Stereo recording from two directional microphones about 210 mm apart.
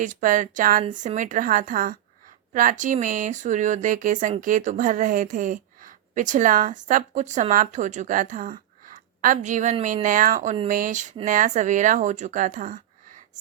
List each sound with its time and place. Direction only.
0.0 s speech: 40° right (ahead or behind)